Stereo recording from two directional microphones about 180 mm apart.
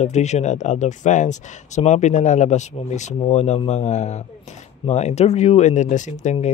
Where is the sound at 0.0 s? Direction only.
40° left (ahead or behind).